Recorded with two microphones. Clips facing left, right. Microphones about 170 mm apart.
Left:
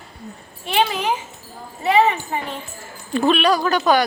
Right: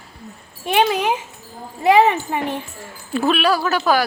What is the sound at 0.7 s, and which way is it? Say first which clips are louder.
A woman's voice: right 3 dB; 50° right (ahead or behind).